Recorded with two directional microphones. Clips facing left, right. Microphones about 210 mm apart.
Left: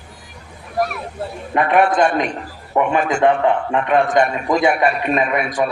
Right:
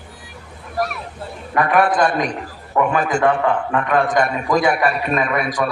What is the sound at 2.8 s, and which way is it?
A man's voice, 20° left (ahead or behind).